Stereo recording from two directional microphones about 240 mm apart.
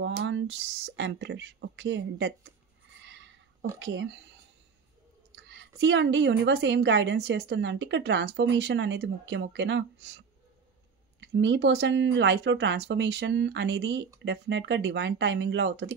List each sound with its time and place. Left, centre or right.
0.0 s a woman's voice: right
3.1 s a sound: right
3.8 s a woman's voice: right
5.3 s a woman's voice: right